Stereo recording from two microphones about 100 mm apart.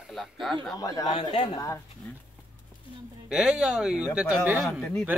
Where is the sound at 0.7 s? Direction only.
35° left (ahead or behind).